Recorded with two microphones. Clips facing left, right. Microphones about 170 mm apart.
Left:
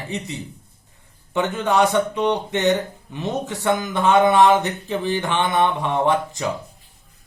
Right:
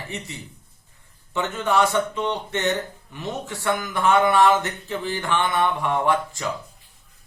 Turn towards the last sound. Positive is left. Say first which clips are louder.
# left 2 dB
turn(degrees=20)  # may be behind; listen again after turning